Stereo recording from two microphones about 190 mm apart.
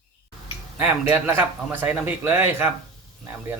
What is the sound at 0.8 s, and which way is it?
Speech, 10° right (ahead or behind).